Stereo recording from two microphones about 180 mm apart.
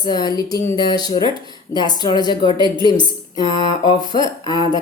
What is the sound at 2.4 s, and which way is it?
Speech, 25° right (ahead or behind).